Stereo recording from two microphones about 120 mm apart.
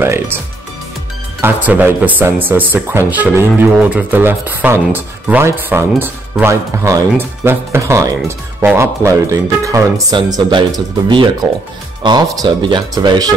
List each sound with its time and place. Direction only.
0.0 s speech: 20° right (ahead or behind)
1.4 s speech: 15° right (ahead or behind); by 10.6 s 35° right (ahead or behind)
12.0 s speech: 35° right (ahead or behind)